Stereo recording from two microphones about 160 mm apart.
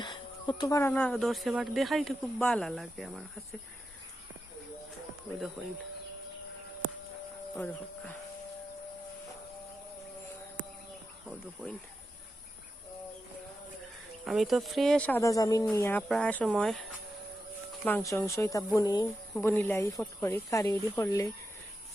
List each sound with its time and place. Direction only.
0.0 s speech: 30° left (ahead or behind); by 3.4 s centre (ahead or behind)
5.6 s speech: 5° right (ahead or behind)
7.5 s speech: 10° left (ahead or behind)
14.3 s speech: centre (ahead or behind)
17.8 s a woman's voice: 15° left (ahead or behind)
19.4 s speech: 15° left (ahead or behind)